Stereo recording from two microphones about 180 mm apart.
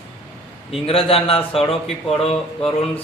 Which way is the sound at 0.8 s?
30° left (ahead or behind).